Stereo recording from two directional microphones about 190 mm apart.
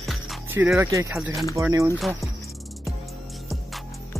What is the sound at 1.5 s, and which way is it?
Speech, 15° right (ahead or behind).